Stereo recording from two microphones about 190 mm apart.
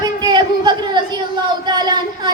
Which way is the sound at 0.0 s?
25° right (ahead or behind).